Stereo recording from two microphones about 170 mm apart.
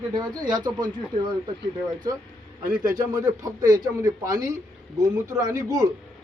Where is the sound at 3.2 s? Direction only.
20° right (ahead or behind).